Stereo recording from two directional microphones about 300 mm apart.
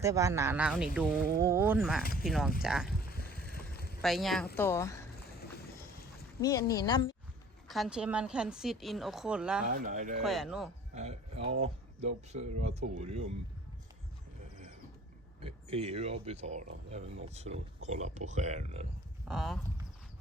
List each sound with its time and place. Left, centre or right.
0.0 s a woman's voice: centre
3.3 s vehicle: left
4.0 s a woman's voice: centre
6.4 s speech: centre
7.7 s a woman's voice: centre
9.6 s speech: right
10.2 s a woman's voice: centre
10.9 s speech: right
15.4 s speech: centre
19.3 s a woman's voice: centre